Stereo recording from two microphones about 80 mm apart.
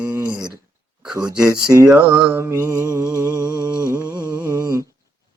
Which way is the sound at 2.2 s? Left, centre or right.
Right.